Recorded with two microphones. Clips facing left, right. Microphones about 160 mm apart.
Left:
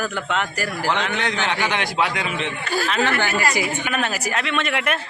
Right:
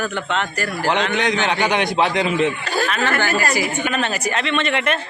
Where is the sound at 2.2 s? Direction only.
40° right (ahead or behind).